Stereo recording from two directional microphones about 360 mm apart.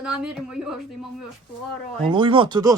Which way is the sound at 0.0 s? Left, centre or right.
Centre.